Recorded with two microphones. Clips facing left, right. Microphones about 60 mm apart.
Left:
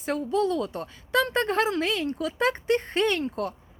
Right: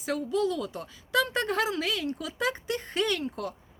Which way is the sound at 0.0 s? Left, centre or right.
Left.